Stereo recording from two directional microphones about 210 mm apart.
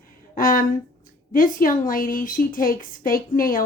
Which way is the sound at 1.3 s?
40° left (ahead or behind).